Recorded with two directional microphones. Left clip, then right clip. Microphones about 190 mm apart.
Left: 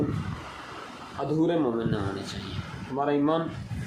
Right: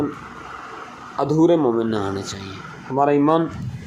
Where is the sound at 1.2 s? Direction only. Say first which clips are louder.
Right 9 dB; 40° right (ahead or behind).